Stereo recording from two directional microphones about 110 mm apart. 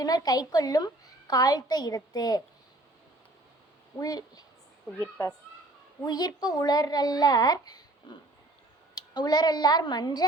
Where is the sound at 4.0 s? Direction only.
35° left (ahead or behind).